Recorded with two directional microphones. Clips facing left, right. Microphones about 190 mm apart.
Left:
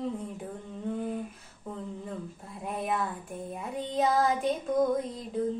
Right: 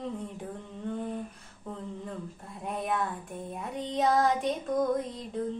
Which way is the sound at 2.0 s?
Centre (ahead or behind).